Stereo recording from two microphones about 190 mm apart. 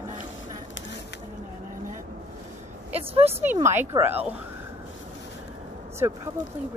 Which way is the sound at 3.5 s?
15° right (ahead or behind).